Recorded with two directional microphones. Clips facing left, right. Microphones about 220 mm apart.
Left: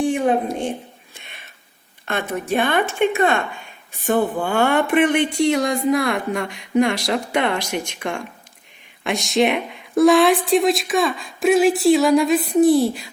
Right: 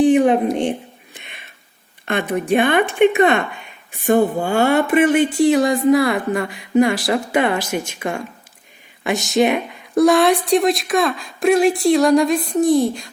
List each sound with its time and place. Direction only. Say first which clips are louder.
0.0 s a sound: right 6 dB; 20° right (ahead or behind)
2.0 s speech: right 4 dB; 15° right (ahead or behind)
4.1 s speech: right 4 dB; 45° right (ahead or behind)
4.4 s speech: right 2 dB; 10° right (ahead or behind); by 13.1 s 5° left (ahead or behind)